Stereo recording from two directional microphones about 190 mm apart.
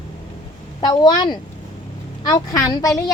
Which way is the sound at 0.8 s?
20° left (ahead or behind).